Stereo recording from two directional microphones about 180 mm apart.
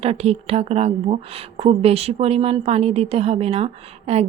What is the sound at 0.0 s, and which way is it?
A woman's voice, 35° right (ahead or behind).